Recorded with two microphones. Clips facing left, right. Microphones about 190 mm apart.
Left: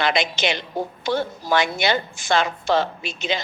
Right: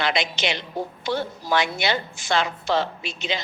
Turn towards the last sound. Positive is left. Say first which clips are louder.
# left 3 dB
turn(degrees=45)  # may be behind; listen again after turning